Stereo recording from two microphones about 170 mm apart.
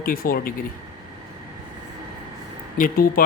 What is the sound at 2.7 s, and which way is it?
Speech, 55° left (ahead or behind).